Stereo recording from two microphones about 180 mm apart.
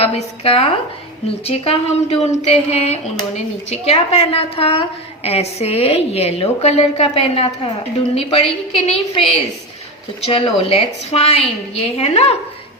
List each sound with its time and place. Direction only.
0.0 s speech: 30° left (ahead or behind)